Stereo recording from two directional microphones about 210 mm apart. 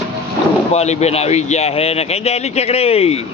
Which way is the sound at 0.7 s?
30° left (ahead or behind).